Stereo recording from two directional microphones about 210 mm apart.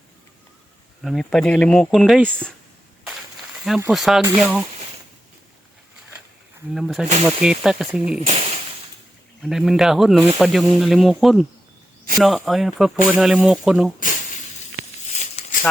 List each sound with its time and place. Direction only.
1.0 s speech: centre (ahead or behind)
3.8 s speech: 5° right (ahead or behind)
6.7 s speech: centre (ahead or behind)
8.2 s a sound: 30° right (ahead or behind)
9.4 s speech: centre (ahead or behind)
15.1 s a sound: 30° left (ahead or behind)